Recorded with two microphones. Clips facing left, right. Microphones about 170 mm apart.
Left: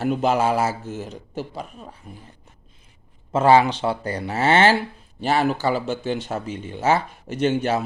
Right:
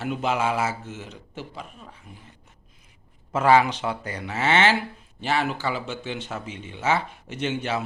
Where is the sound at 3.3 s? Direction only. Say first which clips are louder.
Left 3 dB; 30° left (ahead or behind).